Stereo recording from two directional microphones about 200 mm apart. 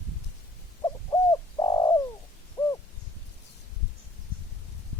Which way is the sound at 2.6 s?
20° left (ahead or behind).